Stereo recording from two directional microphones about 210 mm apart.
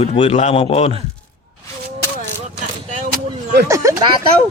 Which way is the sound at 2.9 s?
35° right (ahead or behind).